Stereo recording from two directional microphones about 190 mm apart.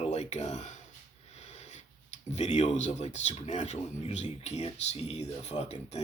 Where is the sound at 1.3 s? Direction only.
35° left (ahead or behind).